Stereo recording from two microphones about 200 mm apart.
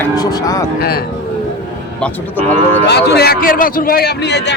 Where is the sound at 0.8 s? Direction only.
50° left (ahead or behind).